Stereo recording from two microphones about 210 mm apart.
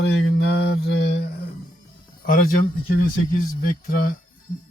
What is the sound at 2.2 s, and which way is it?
Speech, 40° left (ahead or behind).